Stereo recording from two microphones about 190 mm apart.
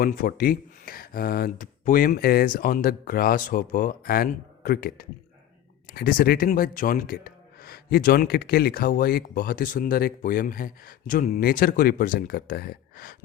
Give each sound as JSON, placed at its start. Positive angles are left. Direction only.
{"t": 0.0, "sound": "speech", "side_deg": 50}